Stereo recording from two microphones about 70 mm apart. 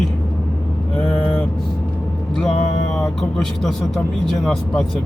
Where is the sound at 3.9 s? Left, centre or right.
Centre.